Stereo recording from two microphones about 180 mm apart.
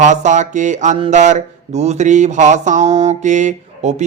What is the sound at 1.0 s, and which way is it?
Speech, 40° right (ahead or behind).